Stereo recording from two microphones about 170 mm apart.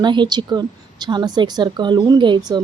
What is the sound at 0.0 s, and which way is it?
A woman's voice, 25° right (ahead or behind).